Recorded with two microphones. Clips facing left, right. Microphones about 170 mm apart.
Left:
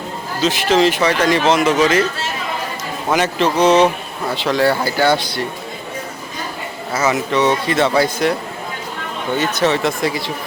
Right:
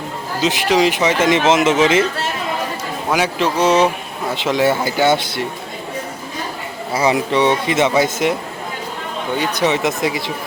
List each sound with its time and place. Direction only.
0.4 s speech: 15° right (ahead or behind)
3.1 s speech: 5° right (ahead or behind)
4.4 s speech: 20° right (ahead or behind)
7.0 s speech: 20° right (ahead or behind)
9.4 s speech: 15° right (ahead or behind)